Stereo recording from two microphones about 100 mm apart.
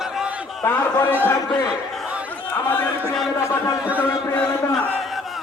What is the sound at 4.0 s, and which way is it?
Speech, 15° left (ahead or behind).